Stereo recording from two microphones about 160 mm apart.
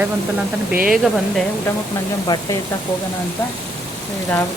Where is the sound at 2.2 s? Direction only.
25° left (ahead or behind).